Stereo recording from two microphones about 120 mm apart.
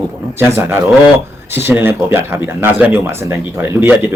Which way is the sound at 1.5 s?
15° right (ahead or behind).